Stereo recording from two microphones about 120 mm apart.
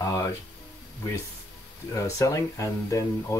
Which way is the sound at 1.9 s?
25° left (ahead or behind).